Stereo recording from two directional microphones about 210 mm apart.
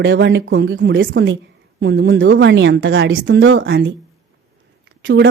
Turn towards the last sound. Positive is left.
turn(degrees=-65)  # may be behind; listen again after turning